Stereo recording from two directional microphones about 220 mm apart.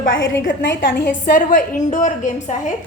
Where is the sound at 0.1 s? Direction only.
60° left (ahead or behind).